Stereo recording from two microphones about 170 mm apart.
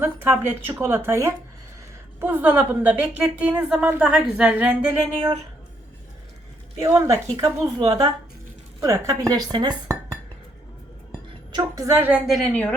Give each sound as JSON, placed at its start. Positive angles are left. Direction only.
{"t": 0.0, "sound": "a woman's voice", "side_deg": -15}
{"t": 6.8, "sound": "speech", "side_deg": -15}
{"t": 11.5, "sound": "a woman's voice", "side_deg": -20}